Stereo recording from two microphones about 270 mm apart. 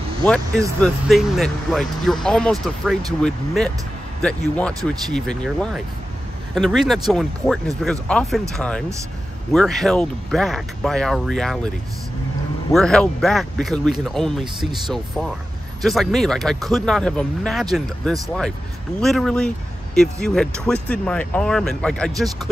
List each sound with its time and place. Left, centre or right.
0.2 s speech: centre
12.7 s speech: centre
14.4 s speech: centre
14.9 s speech: centre